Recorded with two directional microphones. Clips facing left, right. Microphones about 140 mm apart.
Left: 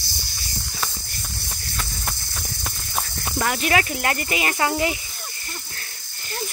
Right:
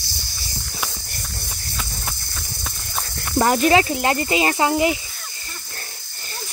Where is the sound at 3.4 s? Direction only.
40° right (ahead or behind).